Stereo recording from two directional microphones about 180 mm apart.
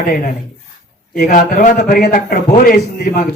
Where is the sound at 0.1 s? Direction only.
50° left (ahead or behind).